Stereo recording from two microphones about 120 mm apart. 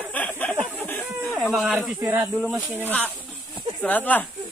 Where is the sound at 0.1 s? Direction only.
10° left (ahead or behind).